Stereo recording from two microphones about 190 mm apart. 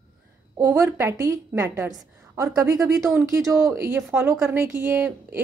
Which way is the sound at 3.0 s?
Centre (ahead or behind).